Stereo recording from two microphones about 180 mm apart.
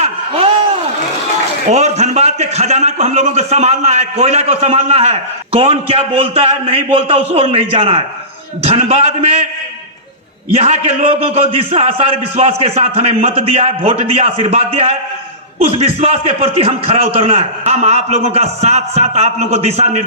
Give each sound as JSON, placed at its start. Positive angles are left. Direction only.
{"t": 0.0, "sound": "a sound", "side_deg": -35}
{"t": 1.7, "sound": "a man's voice", "side_deg": -40}
{"t": 10.5, "sound": "a man's voice", "side_deg": -40}